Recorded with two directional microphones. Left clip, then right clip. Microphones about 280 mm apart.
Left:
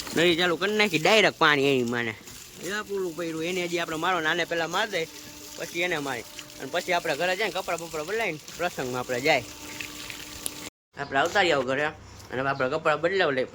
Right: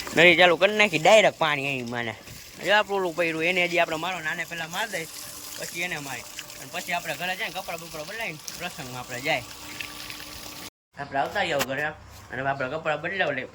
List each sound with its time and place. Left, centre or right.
0.2 s speech: centre
2.6 s speech: centre
4.1 s speech: centre